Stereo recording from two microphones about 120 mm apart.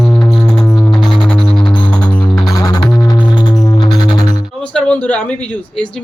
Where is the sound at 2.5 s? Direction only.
25° left (ahead or behind).